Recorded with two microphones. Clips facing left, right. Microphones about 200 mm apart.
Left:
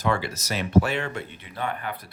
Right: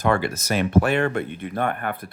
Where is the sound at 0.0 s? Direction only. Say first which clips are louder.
Right 4 dB; 55° right (ahead or behind).